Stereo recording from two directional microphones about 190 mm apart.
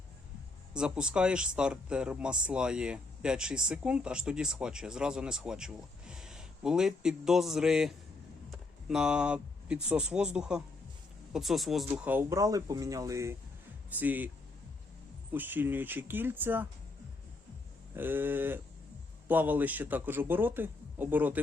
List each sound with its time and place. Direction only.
0.7 s speech: 5° right (ahead or behind)
15.3 s speech: 10° right (ahead or behind)
17.9 s speech: 10° right (ahead or behind)